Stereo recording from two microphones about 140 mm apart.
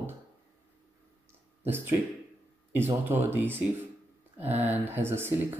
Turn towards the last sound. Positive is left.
turn(degrees=-15)  # may be behind; listen again after turning